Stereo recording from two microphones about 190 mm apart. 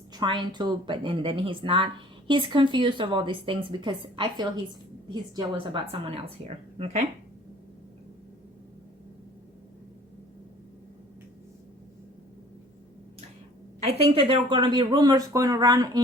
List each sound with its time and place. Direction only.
0.1 s speech: 25° right (ahead or behind)
13.8 s speech: 30° right (ahead or behind)